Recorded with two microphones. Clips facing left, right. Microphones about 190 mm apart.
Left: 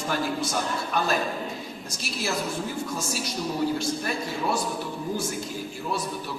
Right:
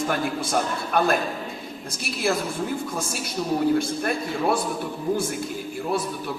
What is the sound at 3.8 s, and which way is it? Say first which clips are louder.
Speech: right 2 dB; 55° right (ahead or behind).